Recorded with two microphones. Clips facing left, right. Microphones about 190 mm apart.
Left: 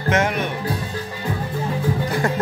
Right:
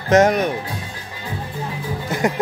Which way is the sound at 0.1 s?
40° right (ahead or behind).